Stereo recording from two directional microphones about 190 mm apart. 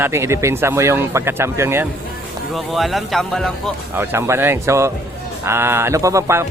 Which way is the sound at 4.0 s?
15° right (ahead or behind).